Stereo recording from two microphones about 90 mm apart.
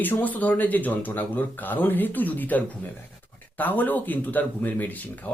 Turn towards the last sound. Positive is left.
turn(degrees=20)  # may be behind; listen again after turning